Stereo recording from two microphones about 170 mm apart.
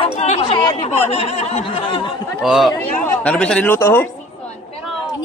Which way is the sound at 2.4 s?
Centre (ahead or behind).